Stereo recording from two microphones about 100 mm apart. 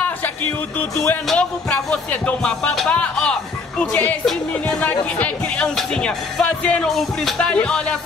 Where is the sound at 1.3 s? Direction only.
10° left (ahead or behind).